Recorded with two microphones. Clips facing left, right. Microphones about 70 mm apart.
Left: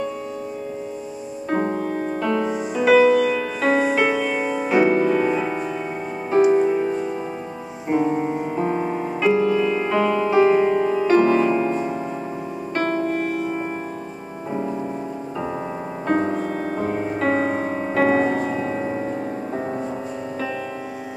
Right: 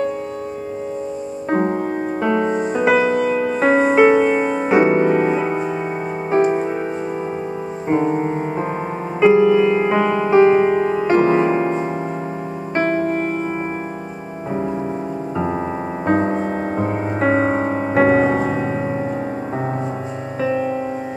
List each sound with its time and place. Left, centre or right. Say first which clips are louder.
1.5 s music: right 3 dB; right
2.5 s music: right 5 dB; right
2.8 s music: left 3 dB; right
7.9 s music: right 2 dB; right
16.1 s music: right 3 dB; right